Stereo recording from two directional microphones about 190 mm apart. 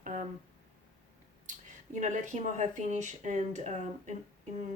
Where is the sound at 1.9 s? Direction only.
40° right (ahead or behind).